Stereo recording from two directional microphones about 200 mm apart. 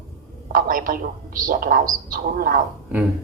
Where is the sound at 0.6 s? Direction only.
45° right (ahead or behind).